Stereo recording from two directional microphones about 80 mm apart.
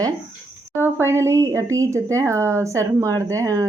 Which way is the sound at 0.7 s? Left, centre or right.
Right.